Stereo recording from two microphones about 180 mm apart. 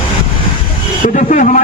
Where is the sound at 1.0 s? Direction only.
45° left (ahead or behind).